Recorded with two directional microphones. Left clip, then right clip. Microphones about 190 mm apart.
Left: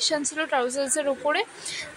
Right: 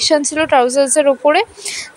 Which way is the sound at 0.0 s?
35° right (ahead or behind).